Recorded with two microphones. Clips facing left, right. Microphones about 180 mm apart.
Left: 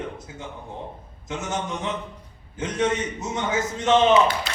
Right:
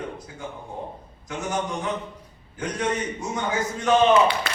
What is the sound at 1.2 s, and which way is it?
A man's voice, 25° left (ahead or behind).